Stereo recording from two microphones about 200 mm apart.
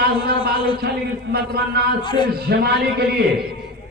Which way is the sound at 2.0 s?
25° left (ahead or behind).